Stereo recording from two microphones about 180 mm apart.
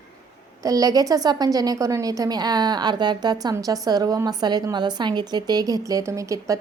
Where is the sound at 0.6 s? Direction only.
20° right (ahead or behind).